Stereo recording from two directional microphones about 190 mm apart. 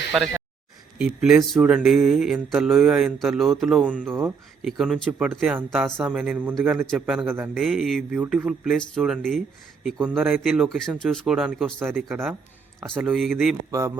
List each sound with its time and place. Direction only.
0.9 s a man's voice: 5° right (ahead or behind)
7.6 s speech: centre (ahead or behind)
13.7 s a man's voice: 15° right (ahead or behind)